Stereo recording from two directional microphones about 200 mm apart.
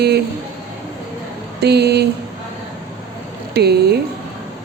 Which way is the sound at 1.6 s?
55° right (ahead or behind).